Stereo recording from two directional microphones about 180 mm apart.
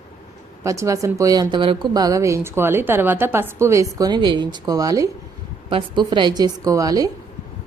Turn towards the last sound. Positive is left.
turn(degrees=-20)  # may be behind; listen again after turning